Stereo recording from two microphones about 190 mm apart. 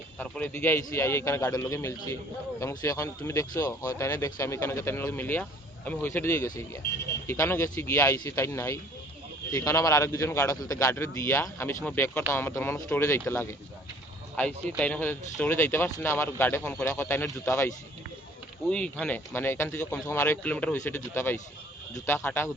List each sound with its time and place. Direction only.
0.2 s speech: 10° left (ahead or behind)
18.7 s speech: 5° left (ahead or behind)